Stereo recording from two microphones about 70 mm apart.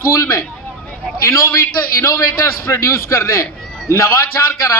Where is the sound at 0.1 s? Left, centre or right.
Left.